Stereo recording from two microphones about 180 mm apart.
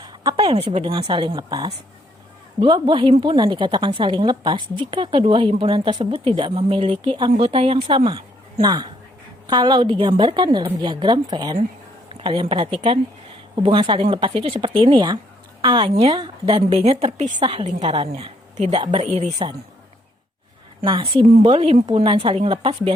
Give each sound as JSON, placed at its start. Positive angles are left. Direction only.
{"t": 0.1, "sound": "a woman's voice", "side_deg": -20}
{"t": 17.2, "sound": "a woman's voice", "side_deg": -25}
{"t": 19.1, "sound": "speech", "side_deg": -40}
{"t": 20.8, "sound": "a woman's voice", "side_deg": -25}